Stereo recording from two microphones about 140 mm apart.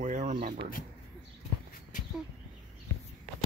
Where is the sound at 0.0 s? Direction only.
60° right (ahead or behind).